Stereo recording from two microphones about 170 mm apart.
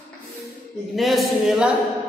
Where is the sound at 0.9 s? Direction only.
Centre (ahead or behind).